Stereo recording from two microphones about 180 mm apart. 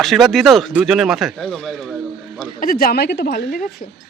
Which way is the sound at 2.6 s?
55° left (ahead or behind).